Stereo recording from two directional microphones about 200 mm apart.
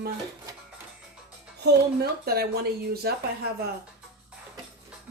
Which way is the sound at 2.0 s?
50° right (ahead or behind).